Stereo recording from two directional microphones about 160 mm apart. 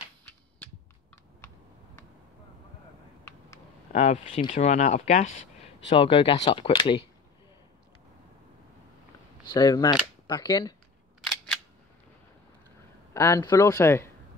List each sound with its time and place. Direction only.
0.2 s a sound: 10° left (ahead or behind)
3.9 s speech: 45° left (ahead or behind)
5.9 s speech: 35° left (ahead or behind)
9.5 s a man's voice: 25° left (ahead or behind)
13.1 s a man's voice: 20° left (ahead or behind)